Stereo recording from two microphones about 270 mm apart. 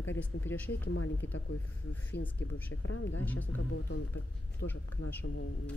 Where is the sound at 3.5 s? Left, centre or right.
Left.